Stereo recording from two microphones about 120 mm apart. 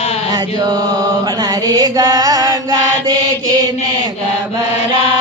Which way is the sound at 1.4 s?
35° right (ahead or behind).